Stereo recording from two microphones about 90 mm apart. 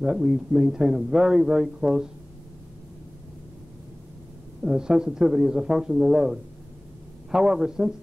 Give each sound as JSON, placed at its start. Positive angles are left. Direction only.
{"t": 0.0, "sound": "a man's voice", "side_deg": -5}
{"t": 4.6, "sound": "a man's voice", "side_deg": -5}